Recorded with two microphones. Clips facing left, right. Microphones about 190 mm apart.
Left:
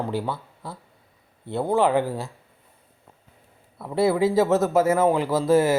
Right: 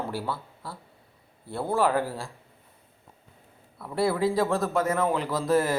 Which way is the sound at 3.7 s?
25° left (ahead or behind).